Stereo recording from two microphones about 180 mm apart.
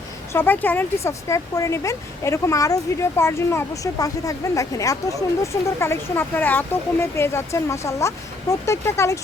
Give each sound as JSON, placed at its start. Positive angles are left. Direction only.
{"t": 0.3, "sound": "speech", "side_deg": 10}